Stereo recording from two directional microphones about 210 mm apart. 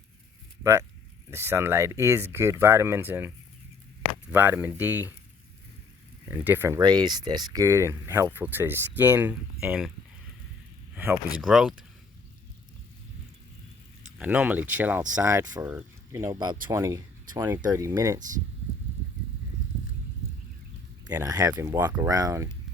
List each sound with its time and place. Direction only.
0.6 s speech: 15° right (ahead or behind)
6.2 s speech: 10° right (ahead or behind)
10.9 s speech: 10° right (ahead or behind)
14.2 s speech: 5° right (ahead or behind)
21.1 s speech: 15° right (ahead or behind)